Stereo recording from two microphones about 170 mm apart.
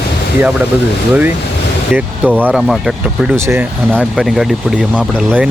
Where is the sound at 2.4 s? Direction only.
Centre (ahead or behind).